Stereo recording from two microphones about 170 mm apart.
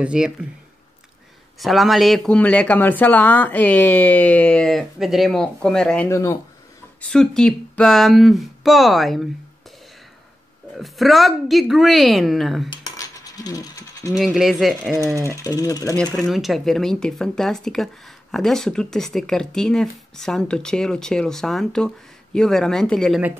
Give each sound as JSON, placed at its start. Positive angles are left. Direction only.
{"t": 0.0, "sound": "speech", "side_deg": -5}
{"t": 1.6, "sound": "speech", "side_deg": 0}
{"t": 6.0, "sound": "speech", "side_deg": 15}
{"t": 7.0, "sound": "speech", "side_deg": 5}
{"t": 10.7, "sound": "speech", "side_deg": 0}
{"t": 12.6, "sound": "mechanisms", "side_deg": 20}
{"t": 14.1, "sound": "speech", "side_deg": 0}
{"t": 15.2, "sound": "speech", "side_deg": 20}
{"t": 16.3, "sound": "speech", "side_deg": 0}